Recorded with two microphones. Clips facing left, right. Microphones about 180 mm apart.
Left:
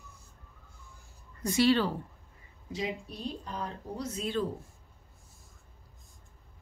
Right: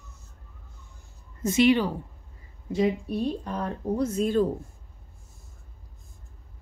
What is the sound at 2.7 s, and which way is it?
Speech, 55° right (ahead or behind).